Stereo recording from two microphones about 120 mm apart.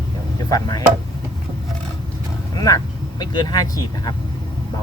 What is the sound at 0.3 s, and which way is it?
Speech, 30° left (ahead or behind).